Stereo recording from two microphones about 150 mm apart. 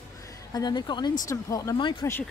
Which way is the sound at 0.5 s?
25° left (ahead or behind).